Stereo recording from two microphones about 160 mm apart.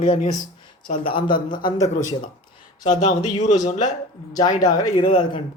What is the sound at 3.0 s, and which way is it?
Speech, 50° left (ahead or behind).